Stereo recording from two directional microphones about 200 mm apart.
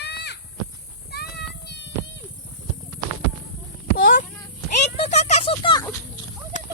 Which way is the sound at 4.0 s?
45° left (ahead or behind).